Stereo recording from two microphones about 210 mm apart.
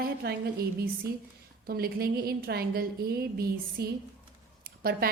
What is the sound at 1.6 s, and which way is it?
A woman's voice, 45° right (ahead or behind).